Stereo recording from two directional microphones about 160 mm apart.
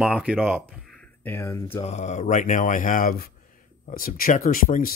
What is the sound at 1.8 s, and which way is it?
Speech, 45° left (ahead or behind).